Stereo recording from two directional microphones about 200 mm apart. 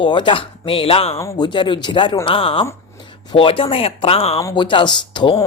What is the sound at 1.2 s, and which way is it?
Speech, 20° left (ahead or behind).